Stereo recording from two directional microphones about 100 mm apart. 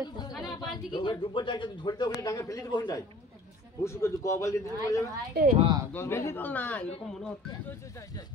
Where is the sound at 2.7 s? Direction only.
45° left (ahead or behind).